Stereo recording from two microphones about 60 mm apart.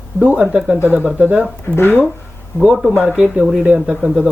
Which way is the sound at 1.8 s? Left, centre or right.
Left.